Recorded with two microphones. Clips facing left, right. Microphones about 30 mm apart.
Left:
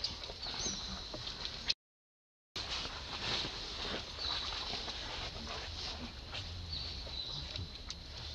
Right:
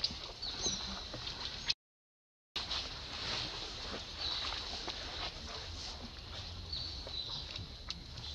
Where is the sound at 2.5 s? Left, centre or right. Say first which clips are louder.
Right 1 dB; right.